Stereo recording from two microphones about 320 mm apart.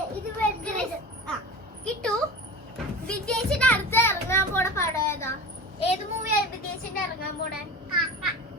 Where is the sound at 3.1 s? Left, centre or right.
Centre.